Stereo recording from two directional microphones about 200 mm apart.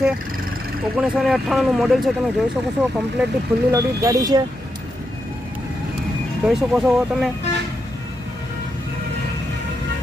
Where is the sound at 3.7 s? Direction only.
15° right (ahead or behind).